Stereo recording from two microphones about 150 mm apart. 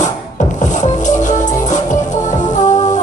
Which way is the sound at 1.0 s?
55° left (ahead or behind).